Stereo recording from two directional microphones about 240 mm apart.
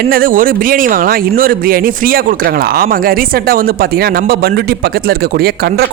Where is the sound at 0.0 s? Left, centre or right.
Right.